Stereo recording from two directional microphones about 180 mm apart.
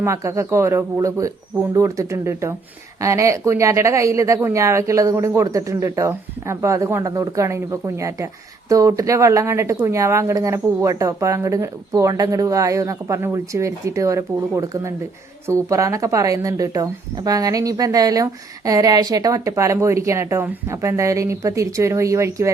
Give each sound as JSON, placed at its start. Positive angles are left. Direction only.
{"t": 0.0, "sound": "speech", "side_deg": -15}